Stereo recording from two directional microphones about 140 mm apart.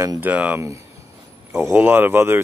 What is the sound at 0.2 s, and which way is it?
Speech, 10° right (ahead or behind).